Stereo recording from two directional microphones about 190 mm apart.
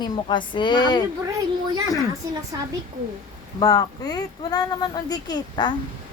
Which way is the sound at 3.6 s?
20° left (ahead or behind).